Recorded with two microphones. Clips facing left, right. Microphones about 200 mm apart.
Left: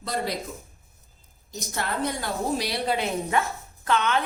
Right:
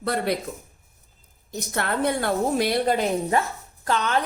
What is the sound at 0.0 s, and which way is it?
Speech, 60° right (ahead or behind).